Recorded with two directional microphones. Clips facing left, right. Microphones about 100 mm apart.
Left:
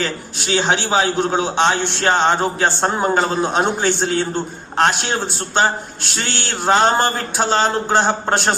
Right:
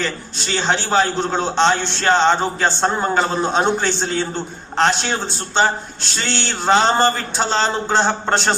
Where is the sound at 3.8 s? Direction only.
55° left (ahead or behind).